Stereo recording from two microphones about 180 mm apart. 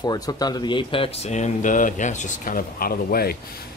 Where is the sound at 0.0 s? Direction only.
20° left (ahead or behind).